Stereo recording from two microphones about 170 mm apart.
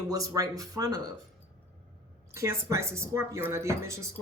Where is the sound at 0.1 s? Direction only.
20° right (ahead or behind).